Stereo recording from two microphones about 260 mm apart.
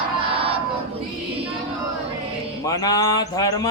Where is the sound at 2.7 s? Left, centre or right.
Centre.